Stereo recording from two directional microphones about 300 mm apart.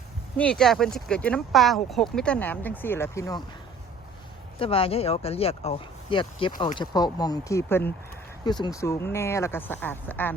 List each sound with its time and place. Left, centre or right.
0.3 s speech: centre
4.6 s speech: centre